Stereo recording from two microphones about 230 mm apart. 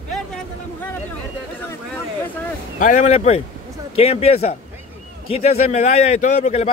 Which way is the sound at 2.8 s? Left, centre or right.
Left.